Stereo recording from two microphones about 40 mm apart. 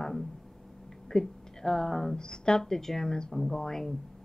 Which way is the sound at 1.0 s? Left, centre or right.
Centre.